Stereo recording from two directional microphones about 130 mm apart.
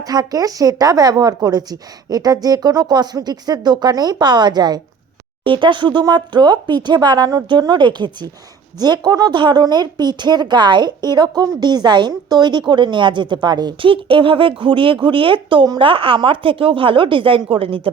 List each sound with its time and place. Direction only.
0.0 s a woman's voice: 30° right (ahead or behind); by 17.9 s 45° right (ahead or behind)